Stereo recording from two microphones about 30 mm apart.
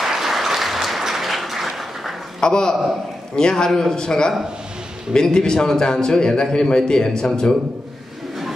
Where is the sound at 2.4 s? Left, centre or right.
Left.